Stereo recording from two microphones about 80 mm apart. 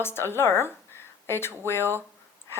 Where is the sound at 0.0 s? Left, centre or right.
Left.